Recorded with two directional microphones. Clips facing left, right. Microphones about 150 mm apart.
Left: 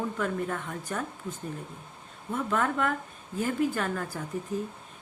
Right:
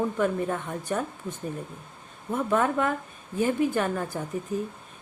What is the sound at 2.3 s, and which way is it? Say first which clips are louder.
Speech: right 4 dB; 20° right (ahead or behind).